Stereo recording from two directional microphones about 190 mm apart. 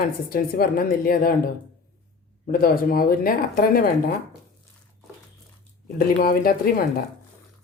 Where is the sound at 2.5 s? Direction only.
50° left (ahead or behind).